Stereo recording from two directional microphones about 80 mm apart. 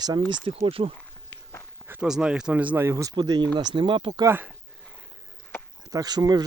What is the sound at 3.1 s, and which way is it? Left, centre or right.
Speech, right.